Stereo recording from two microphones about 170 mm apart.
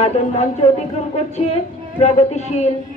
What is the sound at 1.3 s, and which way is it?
Music, 40° left (ahead or behind).